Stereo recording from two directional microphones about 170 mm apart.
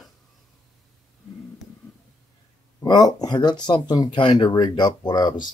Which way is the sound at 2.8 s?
25° left (ahead or behind).